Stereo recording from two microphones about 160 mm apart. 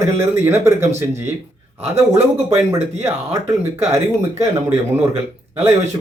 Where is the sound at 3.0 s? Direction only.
15° right (ahead or behind).